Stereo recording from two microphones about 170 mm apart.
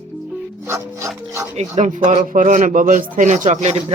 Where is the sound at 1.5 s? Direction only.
40° right (ahead or behind).